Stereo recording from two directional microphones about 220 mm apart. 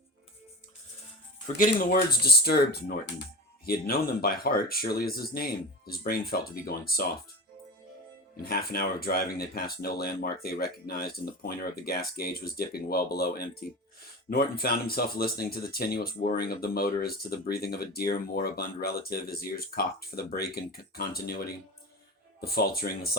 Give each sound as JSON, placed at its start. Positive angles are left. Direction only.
{"t": 1.5, "sound": "speech", "side_deg": 35}
{"t": 8.4, "sound": "speech", "side_deg": 45}